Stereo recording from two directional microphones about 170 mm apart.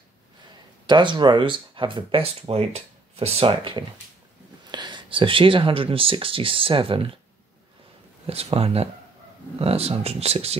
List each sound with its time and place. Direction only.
0.8 s speech: 25° right (ahead or behind)
8.3 s speech: 35° right (ahead or behind)